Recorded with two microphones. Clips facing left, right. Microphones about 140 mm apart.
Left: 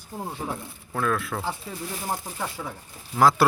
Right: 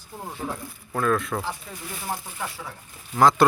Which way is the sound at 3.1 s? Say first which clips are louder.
Right 1 dB; 5° left (ahead or behind).